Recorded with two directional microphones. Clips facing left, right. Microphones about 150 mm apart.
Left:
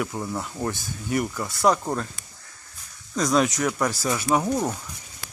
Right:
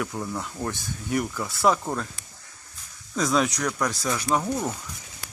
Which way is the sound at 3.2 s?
Centre (ahead or behind).